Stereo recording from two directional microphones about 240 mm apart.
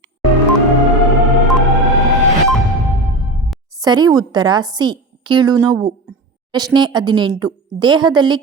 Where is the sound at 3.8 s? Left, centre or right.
Centre.